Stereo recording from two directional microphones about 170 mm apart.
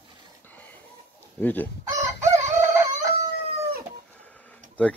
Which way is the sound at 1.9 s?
20° right (ahead or behind).